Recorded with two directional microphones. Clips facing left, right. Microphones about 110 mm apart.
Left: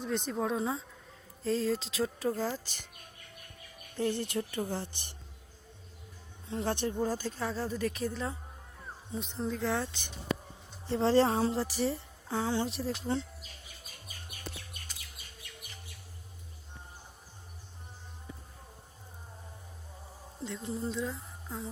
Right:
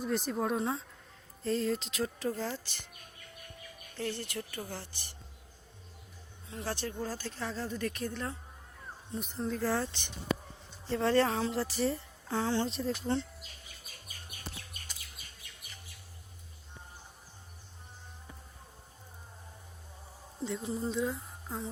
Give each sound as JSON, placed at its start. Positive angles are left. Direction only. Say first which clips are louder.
{"t": 0.0, "sound": "speech", "louder": "even", "side_deg": -5}
{"t": 2.4, "sound": "speech", "louder": "left 3 dB", "side_deg": 10}
{"t": 3.9, "sound": "speech", "louder": "left 6 dB", "side_deg": 15}
{"t": 6.5, "sound": "speech", "louder": "left 5 dB", "side_deg": 30}
{"t": 6.7, "sound": "speech", "louder": "left 6 dB", "side_deg": 20}
{"t": 10.8, "sound": "speech", "louder": "left 2 dB", "side_deg": 25}
{"t": 11.5, "sound": "speech", "louder": "even", "side_deg": 15}
{"t": 20.4, "sound": "speech", "louder": "right 2 dB", "side_deg": -5}